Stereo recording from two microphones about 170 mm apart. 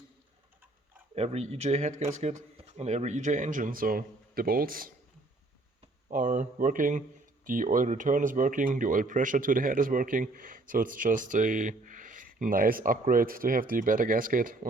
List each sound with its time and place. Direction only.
1.1 s speech: 40° right (ahead or behind); by 4.9 s 60° right (ahead or behind)
6.1 s speech: 50° right (ahead or behind)